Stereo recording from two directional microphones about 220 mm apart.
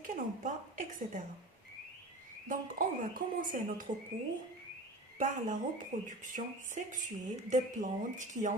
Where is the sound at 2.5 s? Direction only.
40° right (ahead or behind).